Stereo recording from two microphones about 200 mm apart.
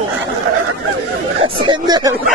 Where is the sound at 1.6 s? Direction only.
20° right (ahead or behind).